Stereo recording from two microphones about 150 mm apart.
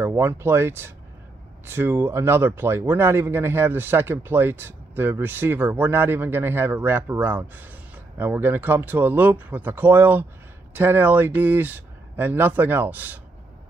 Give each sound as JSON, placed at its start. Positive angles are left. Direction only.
{"t": 0.0, "sound": "speech", "side_deg": -15}